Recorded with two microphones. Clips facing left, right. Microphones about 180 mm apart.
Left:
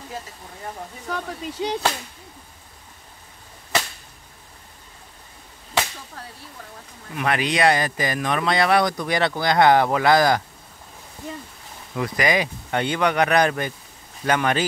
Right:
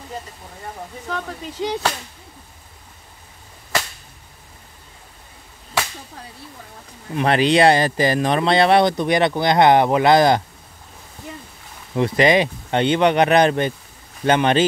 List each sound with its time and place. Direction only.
1.0 s speech: 15° left (ahead or behind)
7.2 s speech: 30° right (ahead or behind)
11.9 s speech: 25° right (ahead or behind)